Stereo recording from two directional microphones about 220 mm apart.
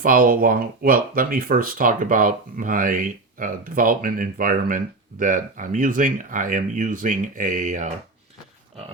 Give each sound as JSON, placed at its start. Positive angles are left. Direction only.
{"t": 0.0, "sound": "speech", "side_deg": -40}